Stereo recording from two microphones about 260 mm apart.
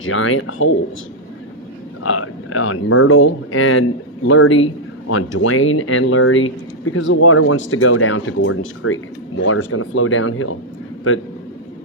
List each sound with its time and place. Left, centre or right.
0.0 s speech: left
2.0 s a man's voice: left